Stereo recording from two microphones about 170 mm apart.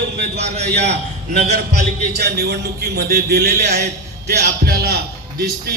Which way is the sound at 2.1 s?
70° right (ahead or behind).